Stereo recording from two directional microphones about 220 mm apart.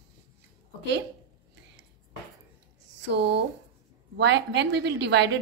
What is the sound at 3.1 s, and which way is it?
A woman's voice, 50° right (ahead or behind).